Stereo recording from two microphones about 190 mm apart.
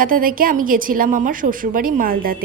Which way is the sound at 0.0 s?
45° right (ahead or behind).